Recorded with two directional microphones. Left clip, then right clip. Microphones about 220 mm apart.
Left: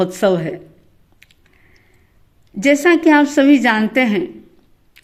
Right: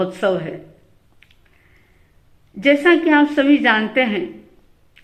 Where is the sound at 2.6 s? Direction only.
45° left (ahead or behind).